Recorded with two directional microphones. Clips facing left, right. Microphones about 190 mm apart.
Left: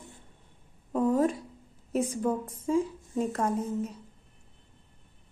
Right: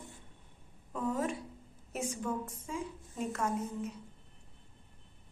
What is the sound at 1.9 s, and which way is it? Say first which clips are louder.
A woman's voice: left 8 dB; 35° left (ahead or behind).